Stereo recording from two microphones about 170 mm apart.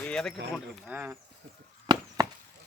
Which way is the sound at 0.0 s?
5° left (ahead or behind).